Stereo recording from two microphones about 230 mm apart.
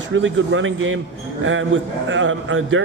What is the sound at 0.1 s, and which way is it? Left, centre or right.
A man's voice, right.